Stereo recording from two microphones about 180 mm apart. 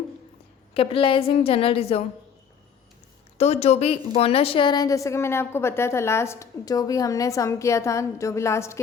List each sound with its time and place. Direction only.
0.7 s a woman's voice: 30° left (ahead or behind)
3.3 s a woman's voice: 35° left (ahead or behind); by 8.8 s 15° left (ahead or behind)